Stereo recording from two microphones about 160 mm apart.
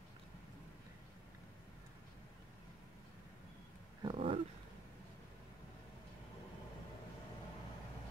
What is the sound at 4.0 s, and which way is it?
Roaring cats, 35° right (ahead or behind).